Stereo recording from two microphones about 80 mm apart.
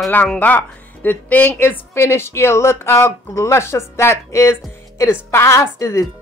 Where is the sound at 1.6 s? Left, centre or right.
Left.